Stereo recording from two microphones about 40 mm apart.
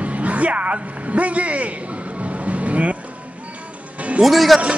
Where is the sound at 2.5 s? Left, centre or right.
Right.